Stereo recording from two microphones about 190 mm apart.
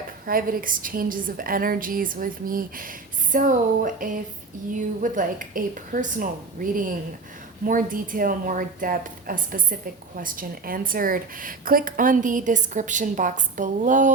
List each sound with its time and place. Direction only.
0.3 s a woman's voice: 45° right (ahead or behind)